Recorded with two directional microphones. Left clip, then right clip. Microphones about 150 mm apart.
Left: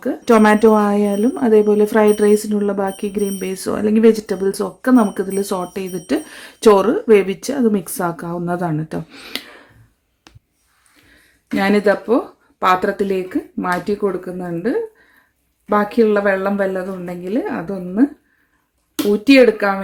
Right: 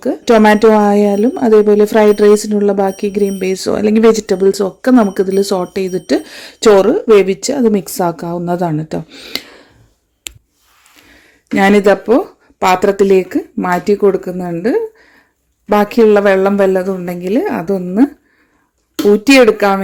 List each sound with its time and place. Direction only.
0.0 s speech: 25° right (ahead or behind)
9.0 s speech: 15° right (ahead or behind)
11.5 s speech: 45° right (ahead or behind)
19.1 s speech: 50° right (ahead or behind)